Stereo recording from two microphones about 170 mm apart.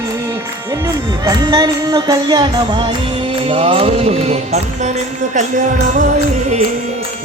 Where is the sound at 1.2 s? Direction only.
25° right (ahead or behind); by 6.0 s 45° right (ahead or behind).